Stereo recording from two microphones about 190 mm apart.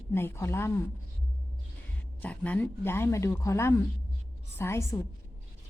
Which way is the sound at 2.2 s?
10° left (ahead or behind).